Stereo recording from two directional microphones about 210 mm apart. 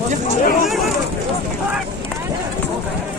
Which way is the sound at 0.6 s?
Centre (ahead or behind).